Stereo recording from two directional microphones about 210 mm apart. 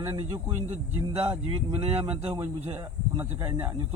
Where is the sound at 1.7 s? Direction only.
30° right (ahead or behind).